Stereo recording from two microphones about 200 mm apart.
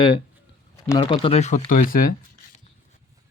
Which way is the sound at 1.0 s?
30° left (ahead or behind).